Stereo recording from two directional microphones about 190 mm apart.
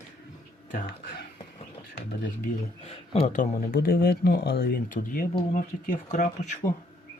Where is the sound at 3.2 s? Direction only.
45° left (ahead or behind).